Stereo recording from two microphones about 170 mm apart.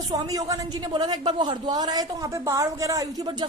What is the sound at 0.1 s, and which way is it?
A woman's voice, 20° right (ahead or behind).